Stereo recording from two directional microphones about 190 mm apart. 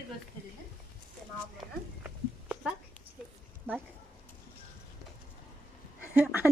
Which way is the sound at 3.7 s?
10° right (ahead or behind).